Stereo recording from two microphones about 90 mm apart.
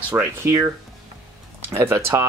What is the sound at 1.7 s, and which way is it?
Speech, 30° right (ahead or behind).